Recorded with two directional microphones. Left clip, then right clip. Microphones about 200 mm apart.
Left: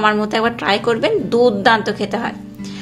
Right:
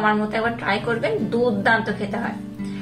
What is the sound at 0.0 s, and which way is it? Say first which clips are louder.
A woman's voice: left 5 dB; 50° left (ahead or behind).